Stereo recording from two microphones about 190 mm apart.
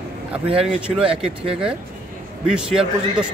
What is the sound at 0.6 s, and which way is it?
Speech, 5° right (ahead or behind).